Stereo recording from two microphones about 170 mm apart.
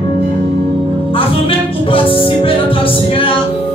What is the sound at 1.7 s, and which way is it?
Music, 30° left (ahead or behind).